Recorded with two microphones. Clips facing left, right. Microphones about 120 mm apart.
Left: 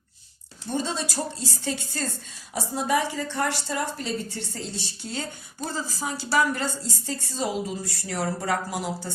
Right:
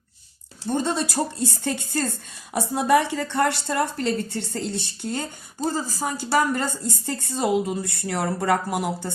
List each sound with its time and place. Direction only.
0.7 s a woman's voice: 55° right (ahead or behind)